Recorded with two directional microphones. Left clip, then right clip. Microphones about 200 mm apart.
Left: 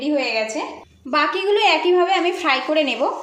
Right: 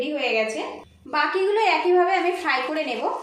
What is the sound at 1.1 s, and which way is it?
A woman's voice, 45° left (ahead or behind).